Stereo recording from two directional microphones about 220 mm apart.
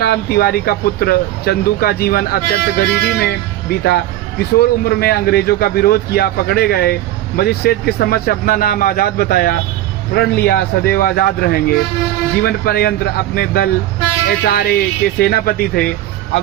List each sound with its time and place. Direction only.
0.0 s speech: 45° left (ahead or behind)